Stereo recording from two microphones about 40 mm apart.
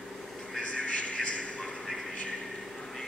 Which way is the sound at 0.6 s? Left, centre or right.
Left.